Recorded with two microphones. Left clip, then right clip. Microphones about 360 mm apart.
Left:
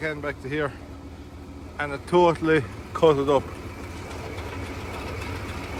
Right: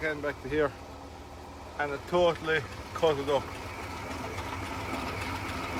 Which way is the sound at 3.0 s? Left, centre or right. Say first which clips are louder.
Left 8 dB; left.